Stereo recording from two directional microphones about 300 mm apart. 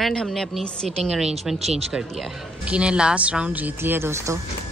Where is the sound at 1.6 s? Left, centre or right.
Right.